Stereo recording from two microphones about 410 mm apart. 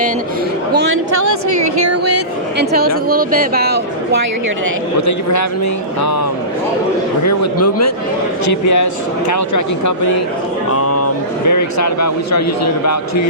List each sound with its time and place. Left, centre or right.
2.6 s a woman's voice: right
4.9 s a man's voice: left
7.3 s a man's voice: left